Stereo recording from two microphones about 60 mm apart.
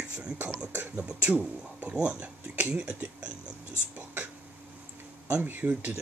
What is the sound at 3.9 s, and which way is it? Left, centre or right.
Speech, right.